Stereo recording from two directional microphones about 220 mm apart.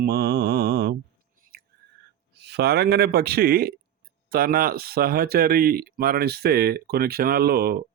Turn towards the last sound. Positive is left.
turn(degrees=-45)  # may be behind; listen again after turning